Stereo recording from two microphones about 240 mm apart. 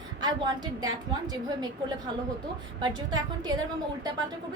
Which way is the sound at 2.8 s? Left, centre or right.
Centre.